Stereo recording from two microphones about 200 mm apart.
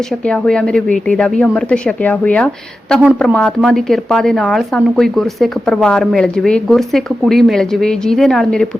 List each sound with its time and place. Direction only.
0.1 s a woman's voice: 5° left (ahead or behind)